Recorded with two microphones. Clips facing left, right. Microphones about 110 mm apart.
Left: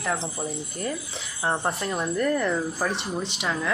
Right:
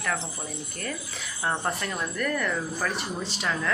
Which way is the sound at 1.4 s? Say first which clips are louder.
Left 2 dB; 20° left (ahead or behind).